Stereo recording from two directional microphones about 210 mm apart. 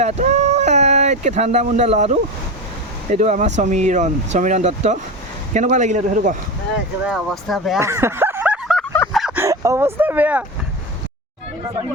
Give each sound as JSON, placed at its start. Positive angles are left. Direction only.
{"t": 0.0, "sound": "speech", "side_deg": -35}
{"t": 7.1, "sound": "speech", "side_deg": 0}
{"t": 7.8, "sound": "a sound", "side_deg": -10}
{"t": 9.1, "sound": "bow-wow", "side_deg": -5}